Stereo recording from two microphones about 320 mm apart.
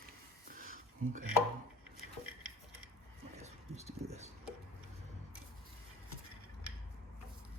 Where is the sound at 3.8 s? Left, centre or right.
Centre.